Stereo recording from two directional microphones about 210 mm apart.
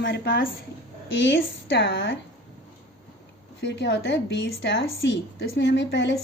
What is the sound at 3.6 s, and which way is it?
A woman's voice, 55° left (ahead or behind).